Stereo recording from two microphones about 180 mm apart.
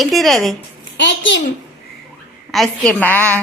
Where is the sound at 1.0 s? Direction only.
90° left.